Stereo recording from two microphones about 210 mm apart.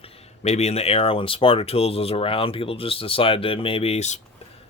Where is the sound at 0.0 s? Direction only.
30° left (ahead or behind).